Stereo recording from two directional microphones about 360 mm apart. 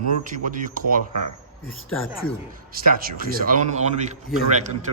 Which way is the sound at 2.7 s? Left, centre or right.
Right.